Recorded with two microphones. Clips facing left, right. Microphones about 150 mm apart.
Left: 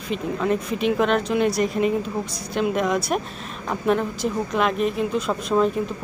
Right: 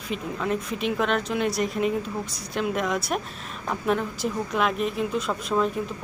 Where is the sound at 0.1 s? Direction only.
Centre (ahead or behind).